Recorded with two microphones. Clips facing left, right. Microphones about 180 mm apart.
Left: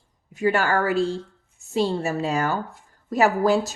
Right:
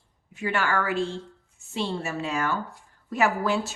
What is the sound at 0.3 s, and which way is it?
A woman's voice, 40° left (ahead or behind).